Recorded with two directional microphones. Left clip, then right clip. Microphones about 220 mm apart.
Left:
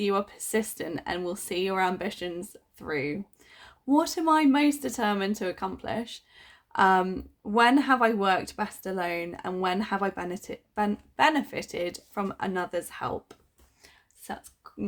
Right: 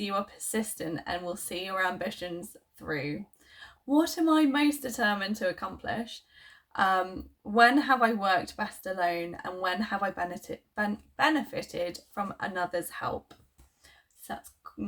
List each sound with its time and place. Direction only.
0.0 s speech: 50° left (ahead or behind)